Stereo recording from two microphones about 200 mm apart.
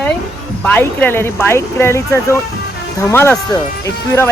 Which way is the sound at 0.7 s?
10° left (ahead or behind).